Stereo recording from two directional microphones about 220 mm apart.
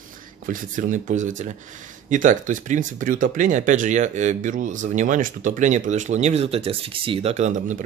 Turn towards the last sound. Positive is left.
turn(degrees=-35)  # may be behind; listen again after turning